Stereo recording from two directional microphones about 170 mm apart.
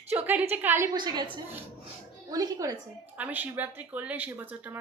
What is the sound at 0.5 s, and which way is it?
Speech, 10° right (ahead or behind).